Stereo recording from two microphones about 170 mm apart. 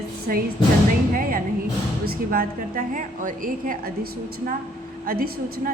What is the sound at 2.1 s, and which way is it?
A woman's voice, 55° right (ahead or behind).